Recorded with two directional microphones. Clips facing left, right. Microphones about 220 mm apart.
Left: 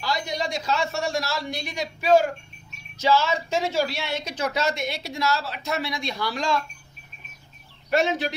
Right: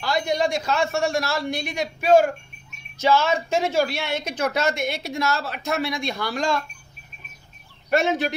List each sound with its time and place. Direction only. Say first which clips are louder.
0.0 s a woman's voice: right 5 dB; 55° right (ahead or behind)
7.9 s a woman's voice: right 2 dB; 50° right (ahead or behind)